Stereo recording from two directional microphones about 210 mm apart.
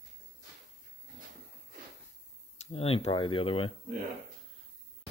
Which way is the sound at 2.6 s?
30° left (ahead or behind).